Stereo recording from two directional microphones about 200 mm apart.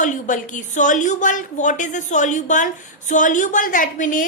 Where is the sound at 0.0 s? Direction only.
40° left (ahead or behind).